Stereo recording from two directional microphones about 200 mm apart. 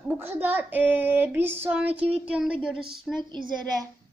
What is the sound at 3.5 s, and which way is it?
Speech, 20° right (ahead or behind).